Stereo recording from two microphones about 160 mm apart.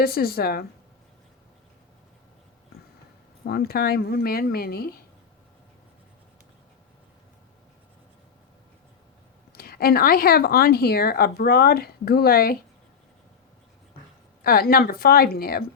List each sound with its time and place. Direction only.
0.0 s speech: 70° left (ahead or behind)
3.4 s speech: 75° left (ahead or behind)
9.5 s speech: 70° left (ahead or behind)
14.4 s speech: 70° left (ahead or behind)